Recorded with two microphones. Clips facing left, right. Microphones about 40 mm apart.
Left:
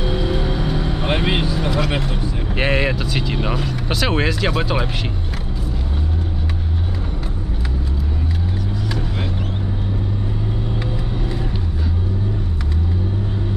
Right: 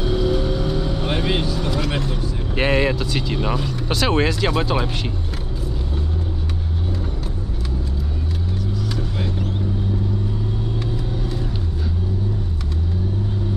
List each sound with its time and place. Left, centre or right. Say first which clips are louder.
0.0 s vehicle: right 1 dB; centre
2.5 s speech: right 1 dB; centre